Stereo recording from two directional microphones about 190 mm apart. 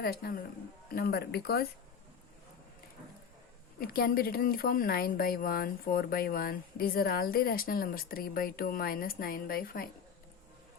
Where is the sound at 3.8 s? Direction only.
50° left (ahead or behind).